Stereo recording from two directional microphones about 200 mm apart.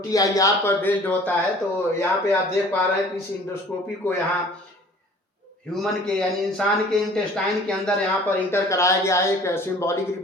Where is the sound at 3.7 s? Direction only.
10° left (ahead or behind).